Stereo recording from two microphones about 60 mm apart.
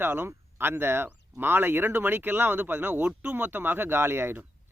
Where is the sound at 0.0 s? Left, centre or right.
Right.